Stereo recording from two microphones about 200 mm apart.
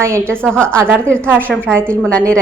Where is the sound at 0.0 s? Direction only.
15° right (ahead or behind).